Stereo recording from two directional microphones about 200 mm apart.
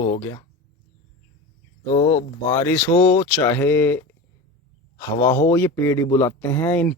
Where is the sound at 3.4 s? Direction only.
10° left (ahead or behind).